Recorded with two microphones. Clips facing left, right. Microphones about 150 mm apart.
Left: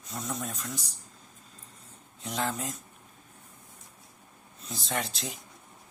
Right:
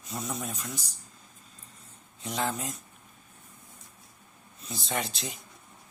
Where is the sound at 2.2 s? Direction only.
Centre (ahead or behind).